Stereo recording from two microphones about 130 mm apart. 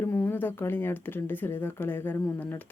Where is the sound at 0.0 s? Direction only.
15° left (ahead or behind).